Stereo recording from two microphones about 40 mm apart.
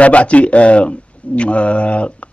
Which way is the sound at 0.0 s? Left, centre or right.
Left.